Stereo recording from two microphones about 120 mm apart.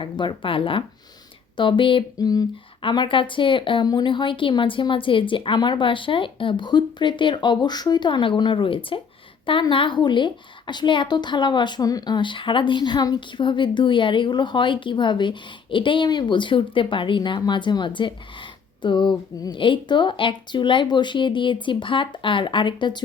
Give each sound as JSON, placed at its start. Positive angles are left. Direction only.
{"t": 0.0, "sound": "a woman's voice", "side_deg": 45}
{"t": 2.1, "sound": "a woman's voice", "side_deg": 30}